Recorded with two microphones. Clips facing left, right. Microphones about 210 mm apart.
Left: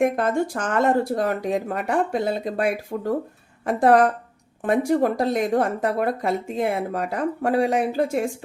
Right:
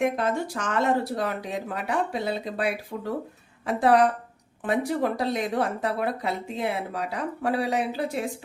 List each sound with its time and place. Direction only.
0.0 s a woman's voice: 50° left (ahead or behind)